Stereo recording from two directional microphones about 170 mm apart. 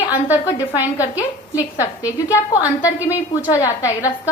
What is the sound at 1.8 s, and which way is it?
Speech, 20° left (ahead or behind).